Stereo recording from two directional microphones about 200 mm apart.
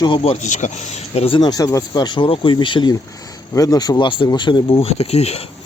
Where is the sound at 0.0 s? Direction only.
30° left (ahead or behind).